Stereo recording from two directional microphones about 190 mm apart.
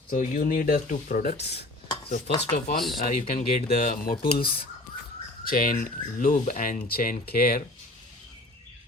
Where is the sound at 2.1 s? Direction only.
35° left (ahead or behind); by 7.6 s 55° left (ahead or behind).